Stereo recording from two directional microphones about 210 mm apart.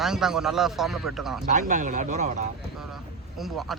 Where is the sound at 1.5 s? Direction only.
35° right (ahead or behind).